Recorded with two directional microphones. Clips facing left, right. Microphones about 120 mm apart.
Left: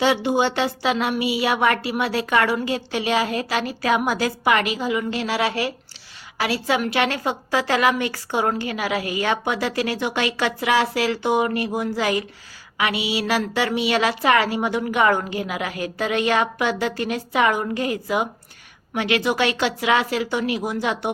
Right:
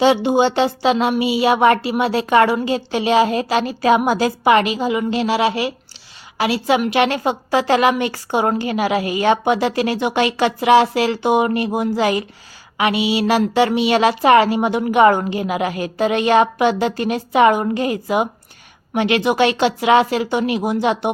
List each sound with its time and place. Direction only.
0.0 s a woman's voice: 25° right (ahead or behind)